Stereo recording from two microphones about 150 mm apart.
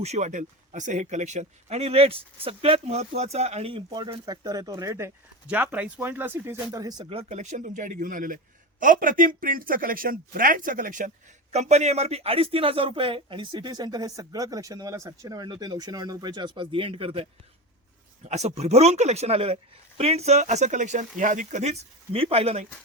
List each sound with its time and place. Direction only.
0.0 s speech: 50° right (ahead or behind); by 7.1 s 25° right (ahead or behind)
7.1 s a man's voice: 45° right (ahead or behind); by 11.1 s 65° right (ahead or behind)
11.5 s a man's voice: 50° right (ahead or behind)